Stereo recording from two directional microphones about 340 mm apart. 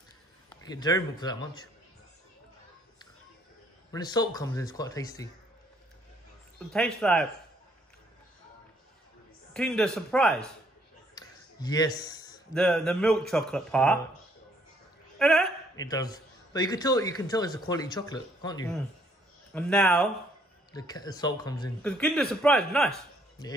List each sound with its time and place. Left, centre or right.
0.5 s speech: centre
3.9 s speech: centre
6.7 s a man's voice: centre
9.5 s a man's voice: centre
15.1 s a man's voice: centre